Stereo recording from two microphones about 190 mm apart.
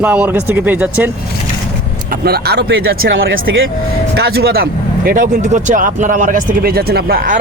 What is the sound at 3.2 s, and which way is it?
Speech, 90° right.